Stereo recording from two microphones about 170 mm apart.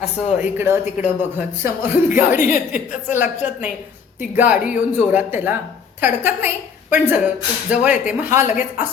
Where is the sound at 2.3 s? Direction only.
10° right (ahead or behind).